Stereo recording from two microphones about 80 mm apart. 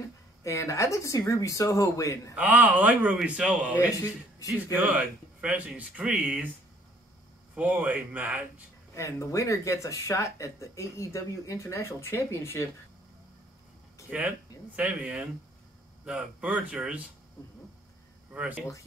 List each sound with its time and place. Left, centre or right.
0.4 s speech: left
2.3 s speech: centre
4.7 s speech: centre
7.5 s speech: centre
8.9 s speech: left
14.1 s speech: centre
18.3 s speech: centre